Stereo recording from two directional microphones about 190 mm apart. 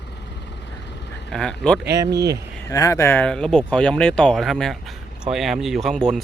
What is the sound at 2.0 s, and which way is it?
Speech, 20° right (ahead or behind).